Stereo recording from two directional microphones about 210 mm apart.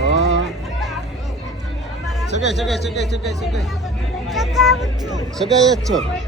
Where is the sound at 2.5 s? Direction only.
Centre (ahead or behind).